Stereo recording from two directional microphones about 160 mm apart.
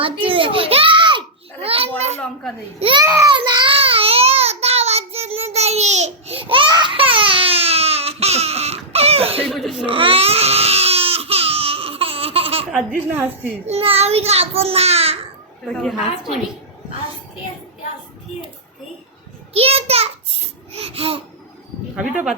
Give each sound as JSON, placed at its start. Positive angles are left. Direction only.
{"t": 0.0, "sound": "a sound", "side_deg": -35}
{"t": 2.7, "sound": "a child's voice", "side_deg": -35}
{"t": 3.0, "sound": "a child's voice", "side_deg": -20}
{"t": 3.3, "sound": "child singing", "side_deg": -30}
{"t": 9.5, "sound": "crying", "side_deg": 0}
{"t": 9.8, "sound": "baby cry", "side_deg": -35}
{"t": 13.1, "sound": "speech", "side_deg": -15}
{"t": 13.7, "sound": "a child's voice", "side_deg": -35}
{"t": 15.7, "sound": "a woman's voice", "side_deg": 0}
{"t": 19.5, "sound": "a sound", "side_deg": -40}
{"t": 21.9, "sound": "speech", "side_deg": -5}